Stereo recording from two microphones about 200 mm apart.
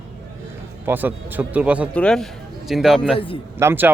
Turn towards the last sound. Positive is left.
turn(degrees=-10)  # may be behind; listen again after turning